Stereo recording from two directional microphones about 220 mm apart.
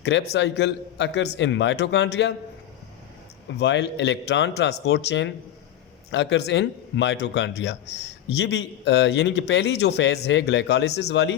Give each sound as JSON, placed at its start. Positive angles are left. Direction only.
{"t": 0.0, "sound": "a man's voice", "side_deg": 50}
{"t": 3.6, "sound": "a man's voice", "side_deg": 50}